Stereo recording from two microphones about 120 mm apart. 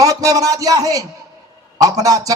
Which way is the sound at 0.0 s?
30° right (ahead or behind).